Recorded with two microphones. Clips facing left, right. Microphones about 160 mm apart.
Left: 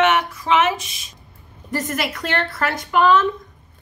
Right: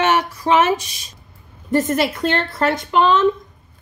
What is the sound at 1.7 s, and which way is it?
A woman's voice, 25° right (ahead or behind).